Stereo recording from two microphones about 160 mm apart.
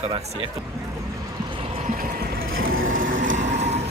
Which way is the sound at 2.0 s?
65° right (ahead or behind).